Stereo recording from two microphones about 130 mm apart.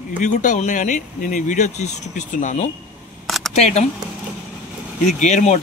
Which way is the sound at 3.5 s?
60° left (ahead or behind).